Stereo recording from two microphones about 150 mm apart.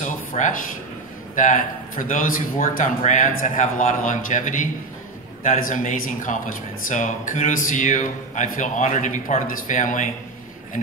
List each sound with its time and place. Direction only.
0.0 s a sound: 55° left (ahead or behind)
1.3 s speech: 55° left (ahead or behind)
3.0 s speech: 55° left (ahead or behind)